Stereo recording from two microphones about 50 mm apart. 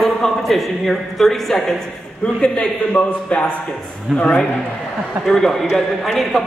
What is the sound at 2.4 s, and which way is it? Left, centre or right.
A man's voice, left.